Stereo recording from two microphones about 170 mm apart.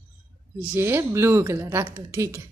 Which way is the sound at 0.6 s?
15° right (ahead or behind).